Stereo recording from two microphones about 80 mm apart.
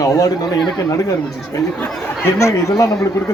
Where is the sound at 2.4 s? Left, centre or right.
Left.